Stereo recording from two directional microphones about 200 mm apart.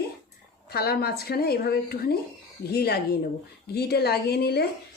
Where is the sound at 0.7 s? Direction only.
50° left (ahead or behind).